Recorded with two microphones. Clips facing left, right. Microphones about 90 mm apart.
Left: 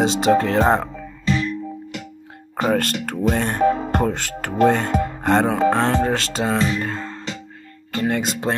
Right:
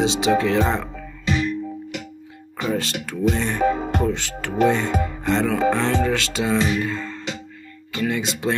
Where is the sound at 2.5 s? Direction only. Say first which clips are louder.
Left 4 dB; 50° left (ahead or behind).